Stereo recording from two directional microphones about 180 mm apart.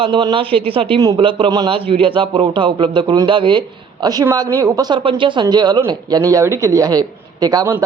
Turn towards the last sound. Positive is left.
turn(degrees=-15)  # may be behind; listen again after turning